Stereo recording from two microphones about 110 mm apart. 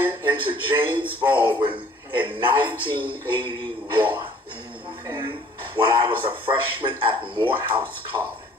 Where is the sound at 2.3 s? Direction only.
50° right (ahead or behind).